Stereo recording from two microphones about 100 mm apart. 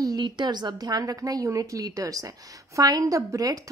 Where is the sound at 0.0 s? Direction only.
45° right (ahead or behind).